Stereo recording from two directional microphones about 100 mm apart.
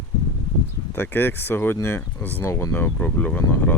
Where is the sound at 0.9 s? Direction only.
20° left (ahead or behind).